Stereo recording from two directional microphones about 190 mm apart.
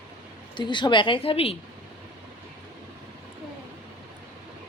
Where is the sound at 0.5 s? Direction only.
25° left (ahead or behind).